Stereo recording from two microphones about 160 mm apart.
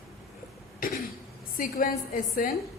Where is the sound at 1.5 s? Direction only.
60° left (ahead or behind).